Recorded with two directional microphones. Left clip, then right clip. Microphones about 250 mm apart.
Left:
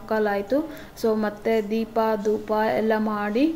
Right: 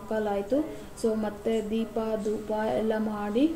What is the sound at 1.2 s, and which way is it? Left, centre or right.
Speech, centre.